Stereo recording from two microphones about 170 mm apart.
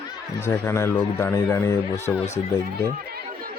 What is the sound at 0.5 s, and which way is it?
Speech, 15° left (ahead or behind).